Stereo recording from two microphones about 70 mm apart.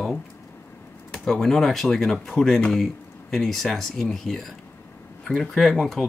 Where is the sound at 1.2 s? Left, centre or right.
Centre.